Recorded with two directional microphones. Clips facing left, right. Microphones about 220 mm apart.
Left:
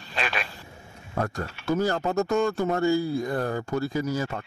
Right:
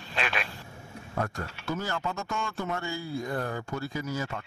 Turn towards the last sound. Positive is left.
turn(degrees=40)  # may be behind; listen again after turning